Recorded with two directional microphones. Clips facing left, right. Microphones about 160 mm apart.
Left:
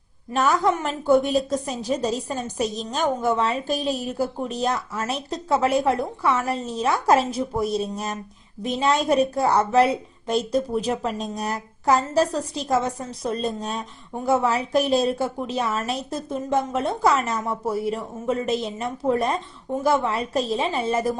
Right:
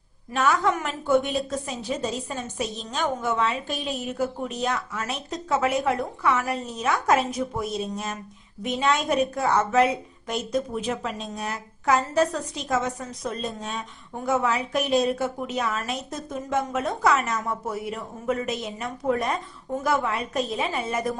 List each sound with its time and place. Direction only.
0.3 s a woman's voice: 35° left (ahead or behind)